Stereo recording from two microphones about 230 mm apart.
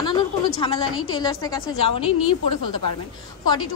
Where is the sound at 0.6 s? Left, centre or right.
Left.